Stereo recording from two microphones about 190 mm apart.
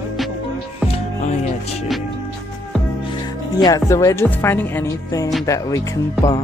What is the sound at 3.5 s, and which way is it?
A woman's voice, 20° left (ahead or behind).